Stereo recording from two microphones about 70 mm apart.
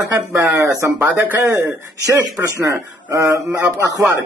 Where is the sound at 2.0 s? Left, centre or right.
Right.